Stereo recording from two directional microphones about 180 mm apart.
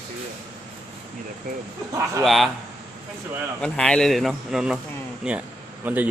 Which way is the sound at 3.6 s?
5° left (ahead or behind).